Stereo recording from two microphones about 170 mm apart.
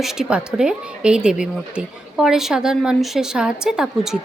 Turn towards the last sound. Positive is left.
turn(degrees=-5)  # may be behind; listen again after turning